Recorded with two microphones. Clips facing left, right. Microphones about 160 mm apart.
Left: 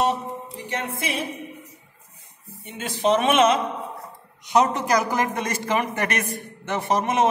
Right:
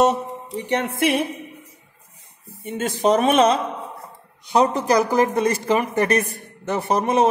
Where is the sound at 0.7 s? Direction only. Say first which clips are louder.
Right 8 dB; 70° right (ahead or behind).